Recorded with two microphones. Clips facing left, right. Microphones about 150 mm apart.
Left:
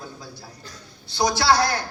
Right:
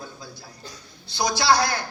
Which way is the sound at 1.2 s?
30° left (ahead or behind).